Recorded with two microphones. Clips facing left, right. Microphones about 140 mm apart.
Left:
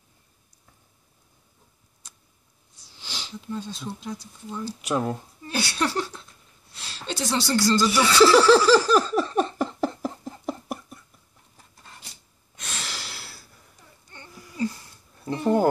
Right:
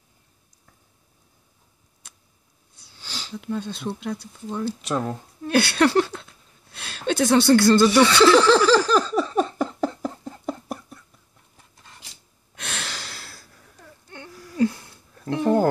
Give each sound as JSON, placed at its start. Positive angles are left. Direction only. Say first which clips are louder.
{"t": 2.0, "sound": "a sound", "louder": "right 1 dB", "side_deg": -60}
{"t": 3.0, "sound": "sniff", "louder": "right 1 dB", "side_deg": 15}
{"t": 3.3, "sound": "speech", "louder": "right 4 dB", "side_deg": -60}
{"t": 4.8, "sound": "speech", "louder": "left 5 dB", "side_deg": 10}
{"t": 5.4, "sound": "speech", "louder": "right 9 dB", "side_deg": -60}
{"t": 6.7, "sound": "speech", "louder": "right 8 dB", "side_deg": -55}
{"t": 8.2, "sound": "a sound", "louder": "left 3 dB", "side_deg": 5}
{"t": 12.5, "sound": "breathing", "louder": "right 4 dB", "side_deg": -65}
{"t": 12.9, "sound": "a sound", "louder": "right 1 dB", "side_deg": 5}
{"t": 14.0, "sound": "whimper", "louder": "right 7 dB", "side_deg": -65}
{"t": 15.3, "sound": "speech", "louder": "right 2 dB", "side_deg": 5}